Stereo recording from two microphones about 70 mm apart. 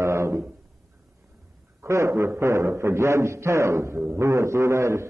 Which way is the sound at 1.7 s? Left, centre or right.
Right.